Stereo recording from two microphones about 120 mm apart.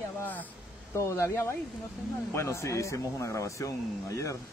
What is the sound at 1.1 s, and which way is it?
Speech, 25° left (ahead or behind).